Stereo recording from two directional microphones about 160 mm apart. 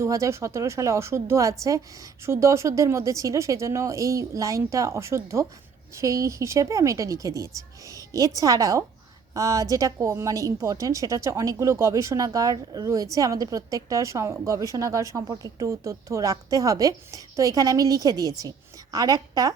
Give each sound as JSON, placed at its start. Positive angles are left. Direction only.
{"t": 0.0, "sound": "a woman's voice", "side_deg": -20}